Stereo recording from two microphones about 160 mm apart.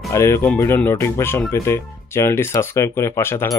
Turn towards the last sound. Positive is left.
turn(degrees=15)  # may be behind; listen again after turning